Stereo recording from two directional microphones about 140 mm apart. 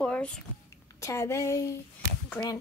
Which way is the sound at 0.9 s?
20° left (ahead or behind).